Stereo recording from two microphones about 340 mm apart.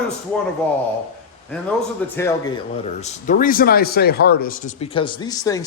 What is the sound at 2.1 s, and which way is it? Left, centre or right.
A man's voice, centre.